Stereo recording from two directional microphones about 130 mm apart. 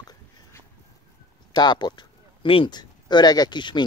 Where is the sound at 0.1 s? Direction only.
20° left (ahead or behind).